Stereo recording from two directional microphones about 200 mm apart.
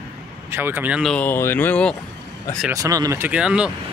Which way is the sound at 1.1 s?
10° left (ahead or behind).